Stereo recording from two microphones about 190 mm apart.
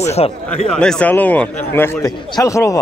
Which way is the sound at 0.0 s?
35° left (ahead or behind).